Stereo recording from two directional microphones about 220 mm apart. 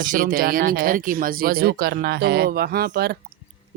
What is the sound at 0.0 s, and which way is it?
Speech, 40° right (ahead or behind).